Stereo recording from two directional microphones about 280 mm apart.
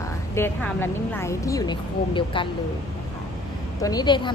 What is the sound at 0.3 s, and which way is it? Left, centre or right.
A woman's voice, centre.